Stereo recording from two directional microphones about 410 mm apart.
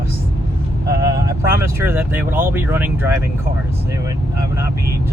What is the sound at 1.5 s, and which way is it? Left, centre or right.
Speech, centre.